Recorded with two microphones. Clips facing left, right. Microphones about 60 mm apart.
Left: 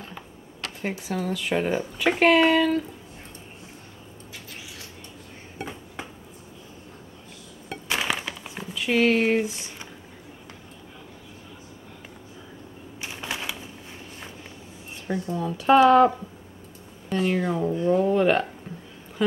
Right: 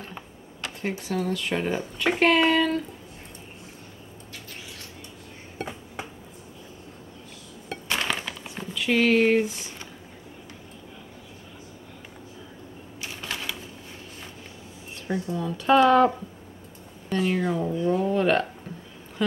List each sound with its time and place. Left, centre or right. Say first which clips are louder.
0.8 s speech: right 1 dB; centre
7.7 s a sound: left 1 dB; centre
13.0 s typewriter: left 1 dB; left
15.2 s speech: left 2 dB; centre